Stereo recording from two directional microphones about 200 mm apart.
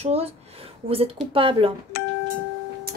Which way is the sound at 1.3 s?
25° right (ahead or behind).